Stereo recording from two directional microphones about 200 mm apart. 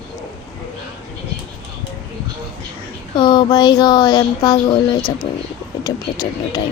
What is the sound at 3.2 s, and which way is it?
Speech, 20° left (ahead or behind).